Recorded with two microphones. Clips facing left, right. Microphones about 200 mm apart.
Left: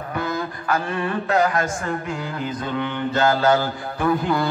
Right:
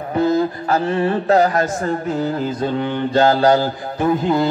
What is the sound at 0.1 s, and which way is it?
Speech, 30° right (ahead or behind).